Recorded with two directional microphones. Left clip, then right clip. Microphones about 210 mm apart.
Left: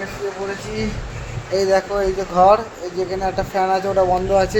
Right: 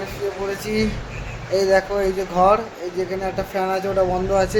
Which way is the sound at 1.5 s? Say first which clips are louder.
Even; 5° right (ahead or behind).